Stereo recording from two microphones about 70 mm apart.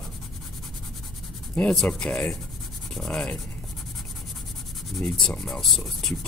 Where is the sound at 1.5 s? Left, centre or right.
Centre.